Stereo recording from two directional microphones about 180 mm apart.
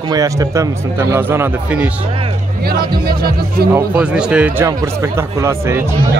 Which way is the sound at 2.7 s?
60° right (ahead or behind).